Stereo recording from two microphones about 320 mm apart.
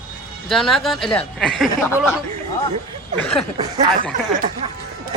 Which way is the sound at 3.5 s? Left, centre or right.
Centre.